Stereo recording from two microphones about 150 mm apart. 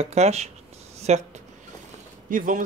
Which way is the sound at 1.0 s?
50° right (ahead or behind).